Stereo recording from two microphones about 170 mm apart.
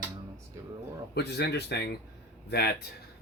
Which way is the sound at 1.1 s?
75° left (ahead or behind).